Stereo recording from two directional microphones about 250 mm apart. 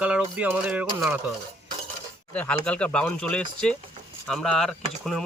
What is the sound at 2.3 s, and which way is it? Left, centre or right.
Speech, centre.